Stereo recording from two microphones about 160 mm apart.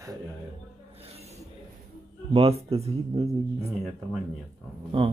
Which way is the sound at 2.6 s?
40° right (ahead or behind).